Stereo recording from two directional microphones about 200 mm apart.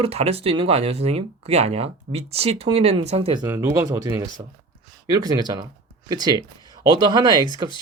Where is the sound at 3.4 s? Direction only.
10° right (ahead or behind).